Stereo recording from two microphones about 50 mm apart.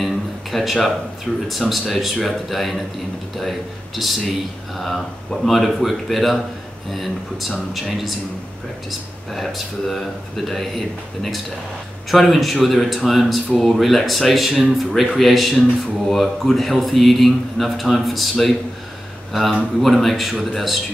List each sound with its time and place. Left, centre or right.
0.0 s a sound: centre
1.3 s speech: centre
9.3 s speech: centre
19.8 s speech: centre